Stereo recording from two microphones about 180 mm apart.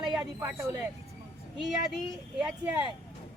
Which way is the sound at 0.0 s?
5° right (ahead or behind).